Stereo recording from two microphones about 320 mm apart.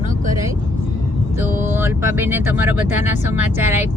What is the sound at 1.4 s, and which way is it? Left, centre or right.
Speech, centre.